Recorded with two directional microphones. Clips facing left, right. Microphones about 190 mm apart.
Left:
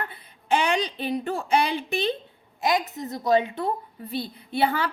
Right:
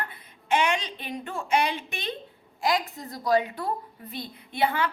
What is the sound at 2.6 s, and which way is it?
A woman's voice, 20° left (ahead or behind).